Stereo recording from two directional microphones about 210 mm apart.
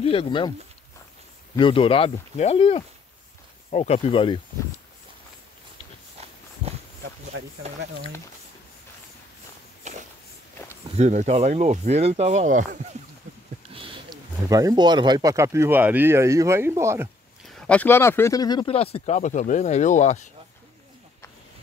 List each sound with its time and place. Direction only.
0.0 s speech: 25° left (ahead or behind)
1.6 s speech: 25° left (ahead or behind)
7.6 s speech: 30° right (ahead or behind)
9.8 s a sound: 35° right (ahead or behind)
11.0 s speech: 35° right (ahead or behind)
13.7 s speech: 25° right (ahead or behind)
17.5 s speech: 5° left (ahead or behind); by 20.2 s 35° left (ahead or behind)